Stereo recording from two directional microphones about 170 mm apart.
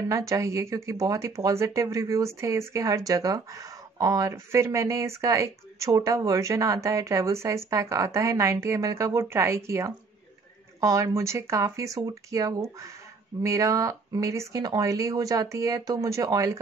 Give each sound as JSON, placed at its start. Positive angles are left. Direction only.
{"t": 0.1, "sound": "speech", "side_deg": -20}